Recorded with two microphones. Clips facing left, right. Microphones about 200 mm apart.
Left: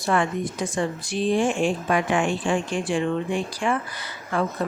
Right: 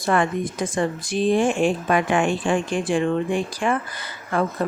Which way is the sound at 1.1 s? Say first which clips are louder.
Right 2 dB; 55° right (ahead or behind).